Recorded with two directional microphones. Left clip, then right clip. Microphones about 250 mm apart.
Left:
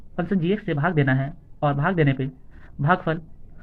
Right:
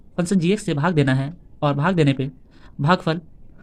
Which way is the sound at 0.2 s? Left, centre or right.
Right.